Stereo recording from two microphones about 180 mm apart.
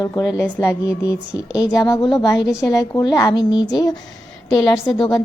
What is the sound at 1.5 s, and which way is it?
A woman's voice, 20° left (ahead or behind).